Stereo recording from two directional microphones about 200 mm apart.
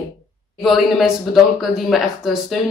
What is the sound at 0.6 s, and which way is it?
Speech, centre (ahead or behind).